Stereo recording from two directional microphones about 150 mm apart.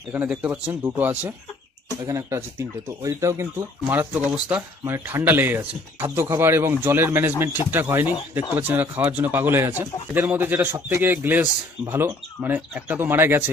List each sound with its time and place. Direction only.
0.1 s speech: 10° right (ahead or behind)